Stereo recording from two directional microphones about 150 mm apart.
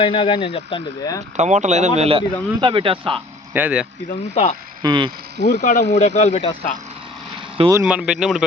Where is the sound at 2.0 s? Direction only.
40° right (ahead or behind).